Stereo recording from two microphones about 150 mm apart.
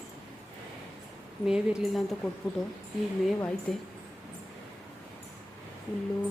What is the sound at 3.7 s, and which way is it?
Speech, centre (ahead or behind).